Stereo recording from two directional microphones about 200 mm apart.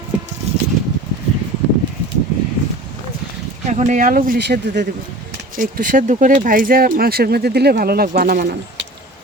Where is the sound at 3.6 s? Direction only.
35° right (ahead or behind); by 4.9 s 55° right (ahead or behind).